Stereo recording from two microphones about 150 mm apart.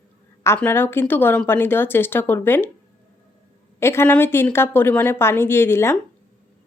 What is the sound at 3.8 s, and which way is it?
Speech, 15° left (ahead or behind).